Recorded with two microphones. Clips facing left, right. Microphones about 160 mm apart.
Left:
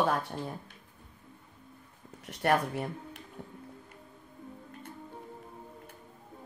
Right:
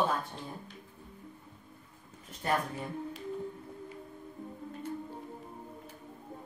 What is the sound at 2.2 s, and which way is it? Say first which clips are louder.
Speech: left 7 dB; 75° left (ahead or behind).